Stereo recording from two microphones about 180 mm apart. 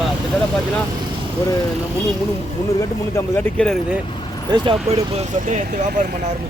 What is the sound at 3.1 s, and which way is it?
Speech, 5° left (ahead or behind).